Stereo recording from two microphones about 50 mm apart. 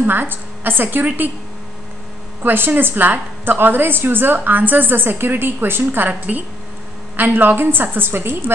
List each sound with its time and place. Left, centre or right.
0.0 s a woman's voice: right
2.4 s a woman's voice: right